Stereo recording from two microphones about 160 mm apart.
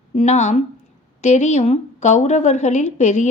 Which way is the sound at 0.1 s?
45° left (ahead or behind).